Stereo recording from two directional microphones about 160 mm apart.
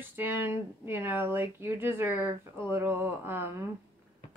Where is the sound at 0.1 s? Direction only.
15° right (ahead or behind).